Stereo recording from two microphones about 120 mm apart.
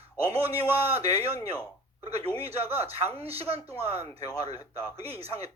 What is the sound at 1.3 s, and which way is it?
Speech, 30° left (ahead or behind).